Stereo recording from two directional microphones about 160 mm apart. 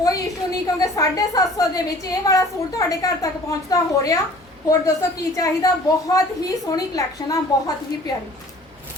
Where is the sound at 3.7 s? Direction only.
20° left (ahead or behind).